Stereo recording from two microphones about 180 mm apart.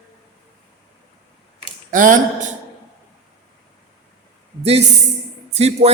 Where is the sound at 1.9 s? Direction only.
50° right (ahead or behind).